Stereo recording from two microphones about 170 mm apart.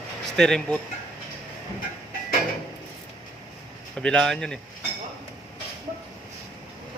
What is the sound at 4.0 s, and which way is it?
Speech, 5° left (ahead or behind).